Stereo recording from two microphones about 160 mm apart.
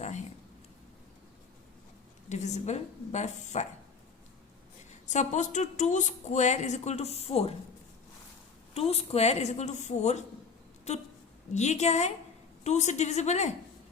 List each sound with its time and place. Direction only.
2.3 s speech: 45° left (ahead or behind)
5.0 s speech: 50° left (ahead or behind)
8.7 s speech: 40° left (ahead or behind)